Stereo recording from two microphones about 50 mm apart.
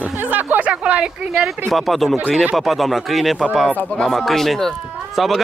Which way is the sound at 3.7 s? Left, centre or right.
Left.